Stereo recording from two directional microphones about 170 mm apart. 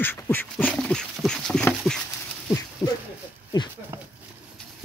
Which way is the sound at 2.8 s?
20° left (ahead or behind).